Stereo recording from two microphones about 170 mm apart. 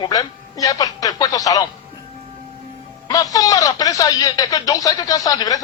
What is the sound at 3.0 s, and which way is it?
Speech, 20° left (ahead or behind).